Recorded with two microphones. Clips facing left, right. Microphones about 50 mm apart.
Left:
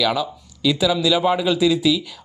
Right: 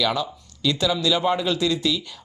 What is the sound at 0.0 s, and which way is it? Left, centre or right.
Speech, centre.